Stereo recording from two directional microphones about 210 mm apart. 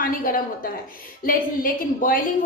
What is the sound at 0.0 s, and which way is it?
A woman's voice, 40° left (ahead or behind).